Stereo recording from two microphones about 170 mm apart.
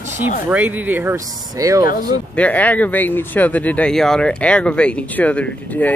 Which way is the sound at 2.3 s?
10° left (ahead or behind).